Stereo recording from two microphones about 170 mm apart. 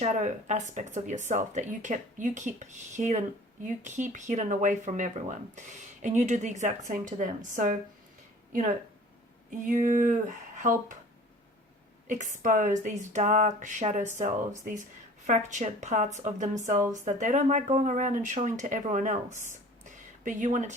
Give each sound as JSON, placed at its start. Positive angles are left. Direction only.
{"t": 0.0, "sound": "speech", "side_deg": -45}
{"t": 9.6, "sound": "speech", "side_deg": -50}
{"t": 12.0, "sound": "speech", "side_deg": -45}